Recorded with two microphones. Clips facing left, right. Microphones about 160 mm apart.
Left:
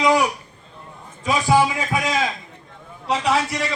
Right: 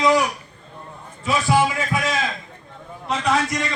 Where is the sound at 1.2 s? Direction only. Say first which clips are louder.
Left 1 dB; 15° left (ahead or behind).